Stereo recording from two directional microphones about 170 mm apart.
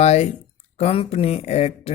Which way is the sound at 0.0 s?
40° left (ahead or behind).